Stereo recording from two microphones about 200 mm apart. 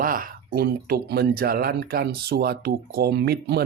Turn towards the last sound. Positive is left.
turn(degrees=-50)  # may be behind; listen again after turning